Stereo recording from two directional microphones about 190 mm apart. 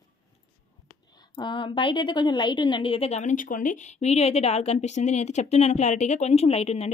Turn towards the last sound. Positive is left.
turn(degrees=35)  # may be behind; listen again after turning